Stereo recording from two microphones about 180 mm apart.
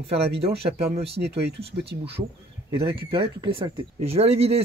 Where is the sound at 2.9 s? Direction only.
25° right (ahead or behind).